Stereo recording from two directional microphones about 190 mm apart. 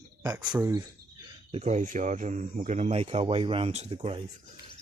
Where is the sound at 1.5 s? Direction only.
35° right (ahead or behind).